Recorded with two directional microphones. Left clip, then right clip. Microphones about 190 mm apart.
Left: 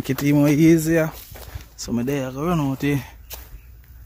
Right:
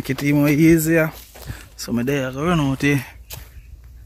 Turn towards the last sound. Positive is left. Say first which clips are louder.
# right 4 dB
turn(degrees=0)  # may be behind; listen again after turning